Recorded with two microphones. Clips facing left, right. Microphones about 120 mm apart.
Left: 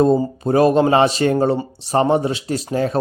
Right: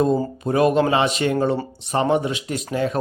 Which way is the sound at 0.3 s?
35° left (ahead or behind).